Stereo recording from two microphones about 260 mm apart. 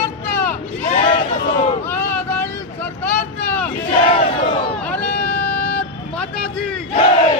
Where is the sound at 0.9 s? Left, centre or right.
Left.